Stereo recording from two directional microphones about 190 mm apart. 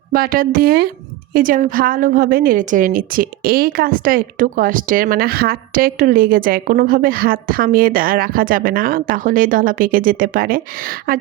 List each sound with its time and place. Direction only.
0.1 s a woman's voice: 50° right (ahead or behind)